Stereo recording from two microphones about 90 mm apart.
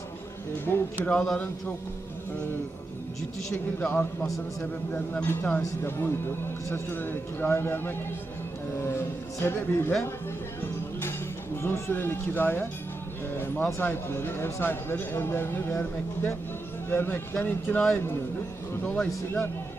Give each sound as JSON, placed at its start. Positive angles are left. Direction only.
{"t": 0.7, "sound": "a man's voice", "side_deg": 25}
{"t": 1.0, "sound": "a man's voice", "side_deg": 10}
{"t": 3.8, "sound": "a man's voice", "side_deg": 20}
{"t": 11.6, "sound": "a man's voice", "side_deg": 30}
{"t": 13.7, "sound": "a man's voice", "side_deg": 25}
{"t": 18.9, "sound": "a man's voice", "side_deg": 20}